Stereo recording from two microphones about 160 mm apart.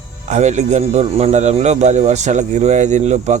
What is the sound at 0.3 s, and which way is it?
A man's voice, 45° right (ahead or behind).